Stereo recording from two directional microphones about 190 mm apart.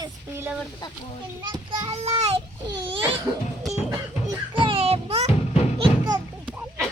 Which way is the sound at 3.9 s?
25° right (ahead or behind).